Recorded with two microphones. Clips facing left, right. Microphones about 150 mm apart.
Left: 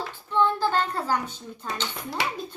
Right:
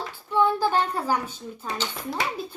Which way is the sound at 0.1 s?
10° right (ahead or behind).